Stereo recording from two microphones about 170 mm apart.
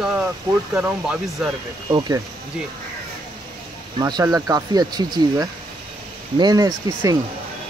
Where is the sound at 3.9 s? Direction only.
25° right (ahead or behind).